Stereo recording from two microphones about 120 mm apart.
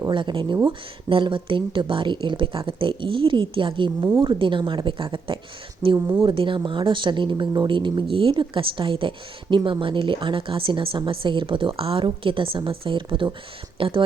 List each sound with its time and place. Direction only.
0.1 s speech: 40° right (ahead or behind)